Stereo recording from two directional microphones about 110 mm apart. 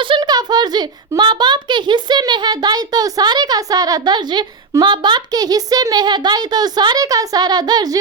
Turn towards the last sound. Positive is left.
turn(degrees=-35)  # may be behind; listen again after turning